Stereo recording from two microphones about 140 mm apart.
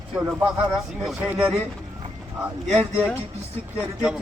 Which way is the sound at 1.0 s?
Centre (ahead or behind).